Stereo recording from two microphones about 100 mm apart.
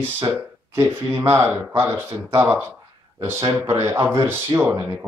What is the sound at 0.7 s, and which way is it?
Speech, 30° right (ahead or behind).